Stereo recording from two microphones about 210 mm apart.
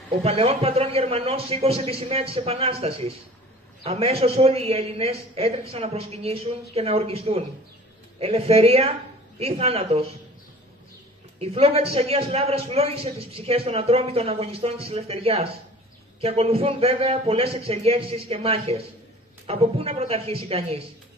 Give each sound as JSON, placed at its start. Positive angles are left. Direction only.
{"t": 0.2, "sound": "a man's voice", "side_deg": -30}
{"t": 11.3, "sound": "a man's voice", "side_deg": -30}